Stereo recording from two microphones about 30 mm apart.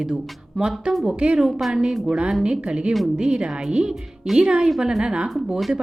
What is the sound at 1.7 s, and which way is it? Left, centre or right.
Speech, centre.